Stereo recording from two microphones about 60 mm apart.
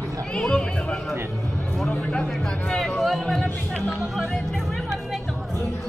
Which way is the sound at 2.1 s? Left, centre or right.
Centre.